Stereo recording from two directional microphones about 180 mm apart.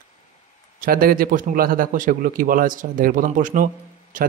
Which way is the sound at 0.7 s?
55° right (ahead or behind).